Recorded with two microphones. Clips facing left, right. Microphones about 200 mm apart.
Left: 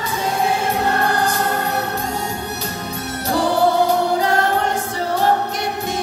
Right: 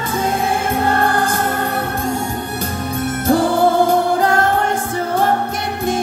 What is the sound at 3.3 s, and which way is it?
Music, 50° right (ahead or behind).